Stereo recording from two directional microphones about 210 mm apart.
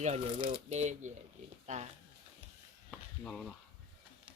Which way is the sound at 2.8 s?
5° left (ahead or behind).